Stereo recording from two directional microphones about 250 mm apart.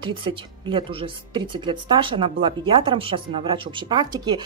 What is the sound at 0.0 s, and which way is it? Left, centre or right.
Speech, centre.